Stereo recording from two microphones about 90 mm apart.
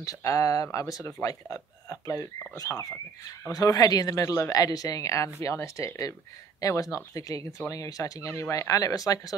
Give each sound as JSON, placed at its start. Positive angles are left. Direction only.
{"t": 0.0, "sound": "speech", "side_deg": 40}